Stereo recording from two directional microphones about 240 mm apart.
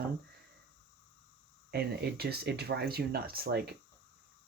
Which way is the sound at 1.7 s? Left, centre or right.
Right.